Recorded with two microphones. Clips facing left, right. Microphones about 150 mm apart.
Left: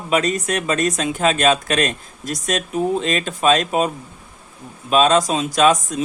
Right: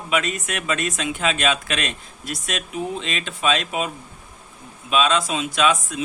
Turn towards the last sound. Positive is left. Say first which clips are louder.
# left 5 dB
turn(degrees=40)  # may be behind; listen again after turning